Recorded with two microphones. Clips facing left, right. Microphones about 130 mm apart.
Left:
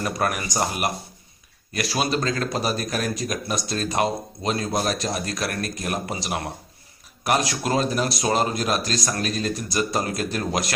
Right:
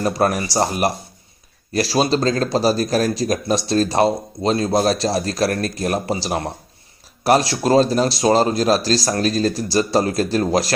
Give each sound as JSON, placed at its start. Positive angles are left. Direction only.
{"t": 0.0, "sound": "speech", "side_deg": -30}